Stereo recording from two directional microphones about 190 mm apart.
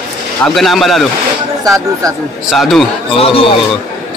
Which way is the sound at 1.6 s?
20° right (ahead or behind).